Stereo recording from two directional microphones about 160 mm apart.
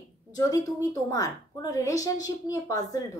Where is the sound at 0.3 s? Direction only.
20° left (ahead or behind).